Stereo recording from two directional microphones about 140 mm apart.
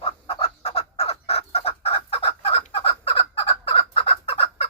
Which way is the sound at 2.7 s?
40° left (ahead or behind).